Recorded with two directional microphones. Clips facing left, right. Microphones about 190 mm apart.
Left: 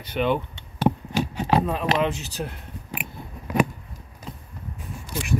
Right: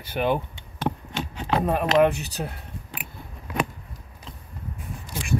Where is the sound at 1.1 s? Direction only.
10° left (ahead or behind).